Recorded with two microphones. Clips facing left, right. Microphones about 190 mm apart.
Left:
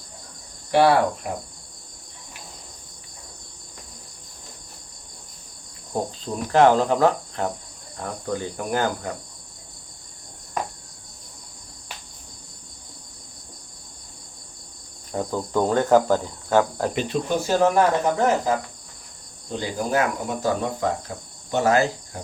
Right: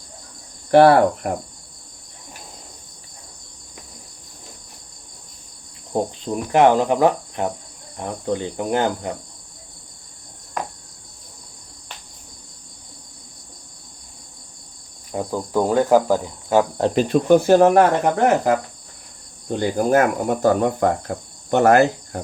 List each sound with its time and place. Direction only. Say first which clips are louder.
0.7 s cricket: right 6 dB; 50° right (ahead or behind)
5.9 s cricket: right 4 dB; 15° right (ahead or behind)
15.1 s cricket: right 2 dB; 10° right (ahead or behind)
17.1 s cricket: right 12 dB; 55° right (ahead or behind)